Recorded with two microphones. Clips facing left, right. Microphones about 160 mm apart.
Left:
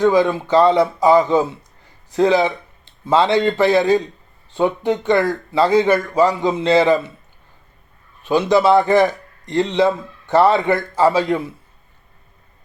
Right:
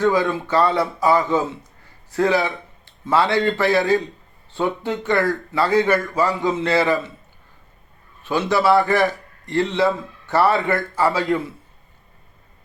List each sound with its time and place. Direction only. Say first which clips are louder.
0.0 s a man's voice: left 4 dB; 15° left (ahead or behind)
8.2 s a man's voice: left 4 dB; 15° left (ahead or behind)